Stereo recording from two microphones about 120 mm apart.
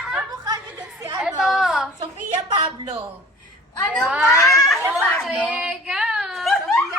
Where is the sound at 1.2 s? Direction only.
Centre (ahead or behind).